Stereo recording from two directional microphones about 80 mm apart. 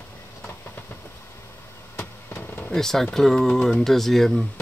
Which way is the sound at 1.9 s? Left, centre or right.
Left.